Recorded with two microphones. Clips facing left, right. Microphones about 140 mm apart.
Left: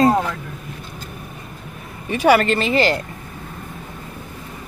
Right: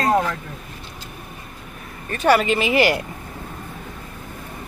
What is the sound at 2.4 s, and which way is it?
Speech, 5° right (ahead or behind).